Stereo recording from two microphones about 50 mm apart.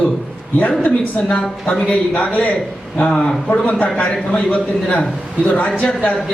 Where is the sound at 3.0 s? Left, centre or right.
Centre.